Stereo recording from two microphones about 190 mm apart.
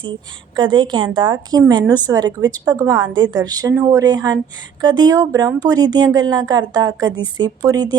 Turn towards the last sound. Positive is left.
turn(degrees=-20)  # may be behind; listen again after turning